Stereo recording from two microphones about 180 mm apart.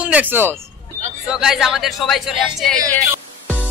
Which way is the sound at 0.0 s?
10° right (ahead or behind).